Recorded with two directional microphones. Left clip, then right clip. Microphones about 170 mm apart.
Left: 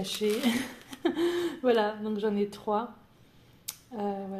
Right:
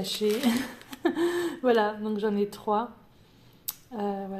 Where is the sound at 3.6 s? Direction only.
10° right (ahead or behind).